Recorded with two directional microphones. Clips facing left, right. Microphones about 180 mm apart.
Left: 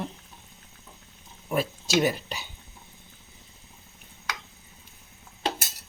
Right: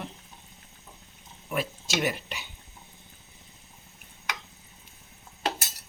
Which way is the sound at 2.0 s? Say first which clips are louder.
Left 5 dB; 35° left (ahead or behind).